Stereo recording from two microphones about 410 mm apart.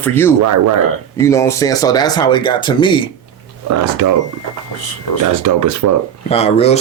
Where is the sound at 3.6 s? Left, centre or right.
Right.